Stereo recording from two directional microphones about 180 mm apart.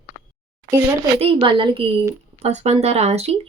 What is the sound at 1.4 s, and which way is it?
Speech, 30° right (ahead or behind).